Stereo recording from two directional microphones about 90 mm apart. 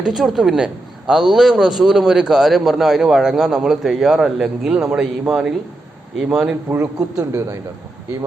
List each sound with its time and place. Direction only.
0.0 s a man's voice: 5° right (ahead or behind)
7.2 s speech: 35° right (ahead or behind)